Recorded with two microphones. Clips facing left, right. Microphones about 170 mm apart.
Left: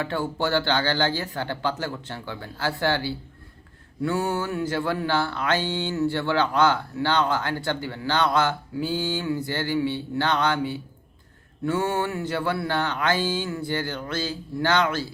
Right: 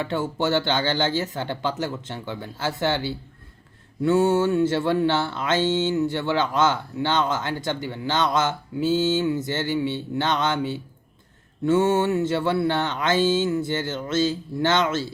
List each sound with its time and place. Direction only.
0.0 s speech: 20° right (ahead or behind)